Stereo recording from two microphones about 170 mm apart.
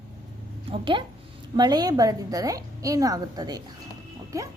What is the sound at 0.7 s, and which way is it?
A woman's voice, 30° right (ahead or behind).